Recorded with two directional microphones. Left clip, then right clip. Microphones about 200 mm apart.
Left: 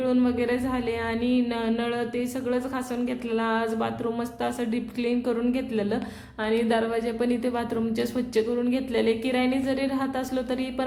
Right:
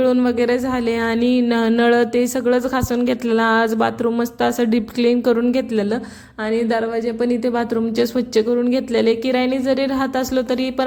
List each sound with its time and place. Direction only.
0.0 s speech: 30° right (ahead or behind)